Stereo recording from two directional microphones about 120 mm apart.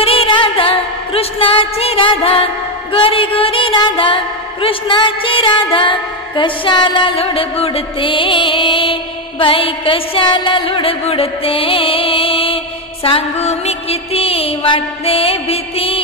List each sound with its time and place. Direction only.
0.0 s music: 50° left (ahead or behind)